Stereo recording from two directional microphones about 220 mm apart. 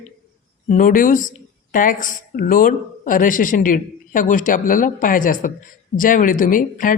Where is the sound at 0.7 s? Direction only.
40° left (ahead or behind).